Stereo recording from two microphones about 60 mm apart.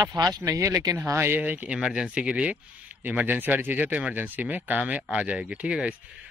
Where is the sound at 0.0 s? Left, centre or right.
Right.